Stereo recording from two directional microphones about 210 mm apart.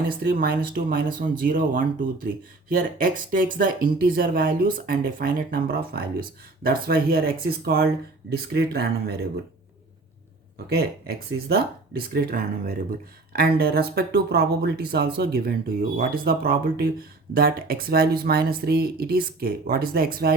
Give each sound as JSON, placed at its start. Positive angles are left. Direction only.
{"t": 0.1, "sound": "speech", "side_deg": -45}
{"t": 11.4, "sound": "speech", "side_deg": -45}